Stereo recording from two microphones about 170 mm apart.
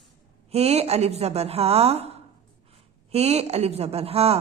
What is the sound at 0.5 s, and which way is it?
A woman's voice, 35° right (ahead or behind).